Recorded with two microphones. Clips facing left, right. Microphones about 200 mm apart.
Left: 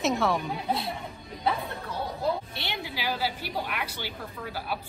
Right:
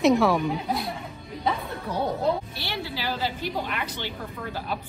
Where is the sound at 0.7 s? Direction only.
25° left (ahead or behind).